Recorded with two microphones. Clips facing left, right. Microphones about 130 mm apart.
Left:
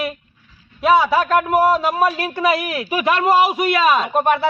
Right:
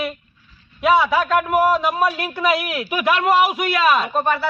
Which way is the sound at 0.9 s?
5° left (ahead or behind).